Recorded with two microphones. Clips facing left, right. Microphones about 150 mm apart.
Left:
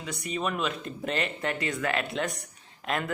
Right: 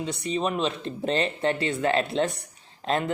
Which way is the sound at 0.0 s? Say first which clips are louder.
Right 5 dB; 30° right (ahead or behind).